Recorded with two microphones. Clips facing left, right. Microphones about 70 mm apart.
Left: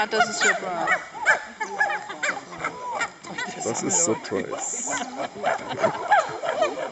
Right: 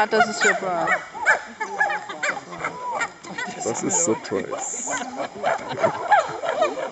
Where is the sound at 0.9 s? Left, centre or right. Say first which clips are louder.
Left 1 dB; centre.